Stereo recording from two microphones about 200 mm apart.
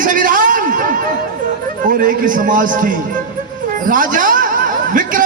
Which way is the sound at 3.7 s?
45° right (ahead or behind).